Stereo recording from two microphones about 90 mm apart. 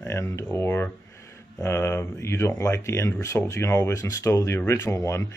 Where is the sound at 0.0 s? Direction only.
30° left (ahead or behind).